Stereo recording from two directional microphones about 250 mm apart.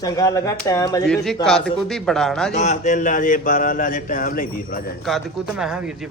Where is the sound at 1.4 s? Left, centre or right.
Centre.